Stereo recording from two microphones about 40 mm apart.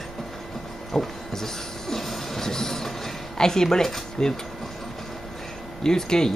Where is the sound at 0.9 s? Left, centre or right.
Centre.